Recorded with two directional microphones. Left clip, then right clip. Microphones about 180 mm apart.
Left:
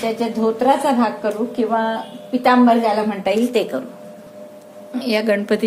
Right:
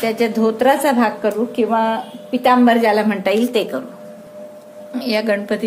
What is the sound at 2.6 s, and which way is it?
Speech, 30° right (ahead or behind).